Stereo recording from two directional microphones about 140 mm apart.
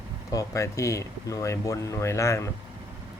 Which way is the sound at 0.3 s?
25° left (ahead or behind).